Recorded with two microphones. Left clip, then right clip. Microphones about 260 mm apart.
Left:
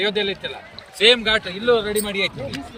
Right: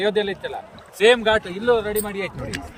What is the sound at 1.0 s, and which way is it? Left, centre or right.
Speech, right.